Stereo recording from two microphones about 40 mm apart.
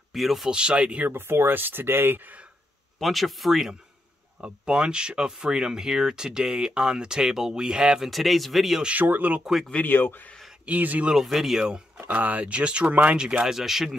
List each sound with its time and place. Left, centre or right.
0.1 s speech: centre
0.5 s speech: right
1.1 s speech: right
3.0 s speech: centre
4.4 s speech: right
8.0 s speech: centre
9.0 s speech: right
9.8 s speech: left
10.6 s speech: right
11.1 s speech: centre
12.1 s speech: right
12.4 s speech: right
12.9 s speech: right
13.4 s speech: centre